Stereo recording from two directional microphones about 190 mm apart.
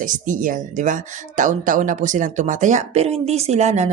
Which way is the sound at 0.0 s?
45° right (ahead or behind).